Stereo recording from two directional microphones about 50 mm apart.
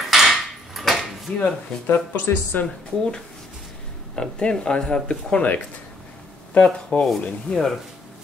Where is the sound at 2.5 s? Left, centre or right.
Left.